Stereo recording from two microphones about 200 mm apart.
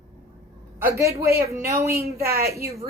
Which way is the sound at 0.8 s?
15° right (ahead or behind).